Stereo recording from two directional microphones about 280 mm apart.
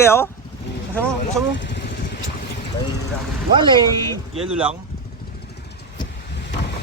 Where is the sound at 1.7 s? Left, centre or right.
Left.